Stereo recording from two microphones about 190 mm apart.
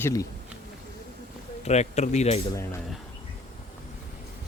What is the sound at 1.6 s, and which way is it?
Speech, 35° left (ahead or behind).